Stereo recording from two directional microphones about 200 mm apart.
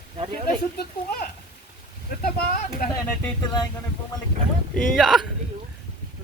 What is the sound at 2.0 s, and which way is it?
Speech, 45° left (ahead or behind).